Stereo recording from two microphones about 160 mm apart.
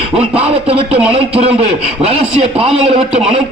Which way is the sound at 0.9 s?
10° right (ahead or behind).